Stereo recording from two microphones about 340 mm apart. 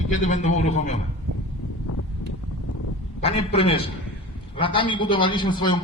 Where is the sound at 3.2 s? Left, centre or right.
Centre.